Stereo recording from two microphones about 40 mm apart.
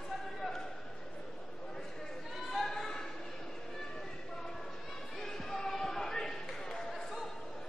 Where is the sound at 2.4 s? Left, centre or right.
Centre.